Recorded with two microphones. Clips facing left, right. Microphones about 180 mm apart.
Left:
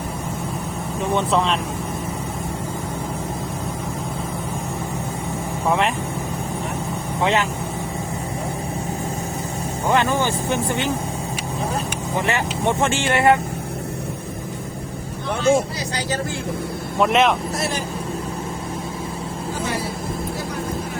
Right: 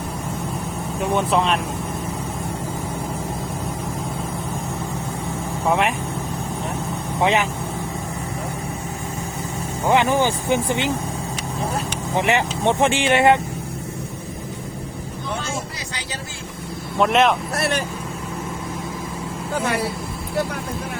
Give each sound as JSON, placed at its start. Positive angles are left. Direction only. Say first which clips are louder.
{"t": 1.1, "sound": "speech", "louder": "even", "side_deg": -5}
{"t": 5.6, "sound": "speech", "louder": "even", "side_deg": -10}
{"t": 7.2, "sound": "speech", "louder": "right 1 dB", "side_deg": -15}
{"t": 9.9, "sound": "speech", "louder": "right 2 dB", "side_deg": -15}
{"t": 12.1, "sound": "speech", "louder": "right 3 dB", "side_deg": -20}
{"t": 17.0, "sound": "speech", "louder": "even", "side_deg": 0}
{"t": 17.5, "sound": "speech", "louder": "right 2 dB", "side_deg": -65}
{"t": 19.6, "sound": "speech", "louder": "right 4 dB", "side_deg": -65}